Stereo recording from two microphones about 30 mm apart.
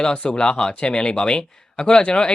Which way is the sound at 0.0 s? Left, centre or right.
Left.